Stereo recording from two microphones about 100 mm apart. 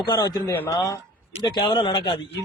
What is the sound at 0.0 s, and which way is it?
Speech, 45° left (ahead or behind).